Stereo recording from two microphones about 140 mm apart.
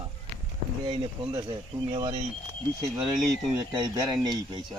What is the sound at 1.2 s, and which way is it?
Speech, 25° right (ahead or behind).